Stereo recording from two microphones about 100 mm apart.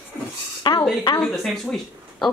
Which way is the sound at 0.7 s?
50° left (ahead or behind).